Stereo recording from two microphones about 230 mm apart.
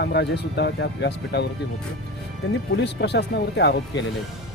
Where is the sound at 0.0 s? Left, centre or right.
Left.